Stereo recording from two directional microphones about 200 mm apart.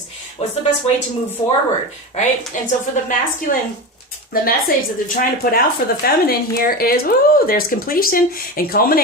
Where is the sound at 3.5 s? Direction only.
40° left (ahead or behind).